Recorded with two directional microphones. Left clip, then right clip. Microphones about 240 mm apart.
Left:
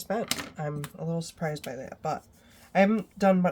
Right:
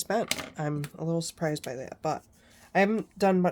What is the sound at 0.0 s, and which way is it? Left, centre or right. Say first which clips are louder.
Speech: right 2 dB; right.